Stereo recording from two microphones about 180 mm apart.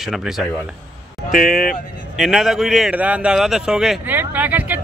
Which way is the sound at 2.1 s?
Centre (ahead or behind).